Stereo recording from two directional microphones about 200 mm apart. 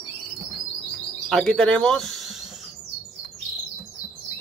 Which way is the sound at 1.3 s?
5° left (ahead or behind).